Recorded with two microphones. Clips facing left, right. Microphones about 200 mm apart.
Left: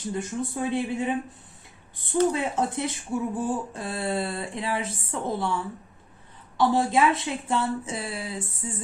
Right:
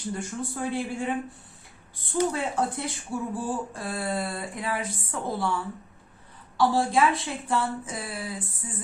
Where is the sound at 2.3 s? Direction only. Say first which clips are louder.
Left 2 dB; 20° left (ahead or behind).